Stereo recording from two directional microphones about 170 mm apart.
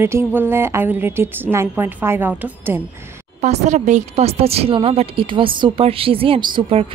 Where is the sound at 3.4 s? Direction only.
45° right (ahead or behind).